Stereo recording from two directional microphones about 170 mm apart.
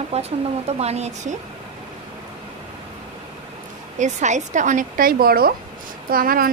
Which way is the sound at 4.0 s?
45° right (ahead or behind).